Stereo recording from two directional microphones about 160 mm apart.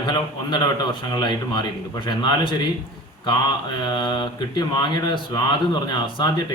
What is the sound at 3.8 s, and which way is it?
Speech, 25° left (ahead or behind).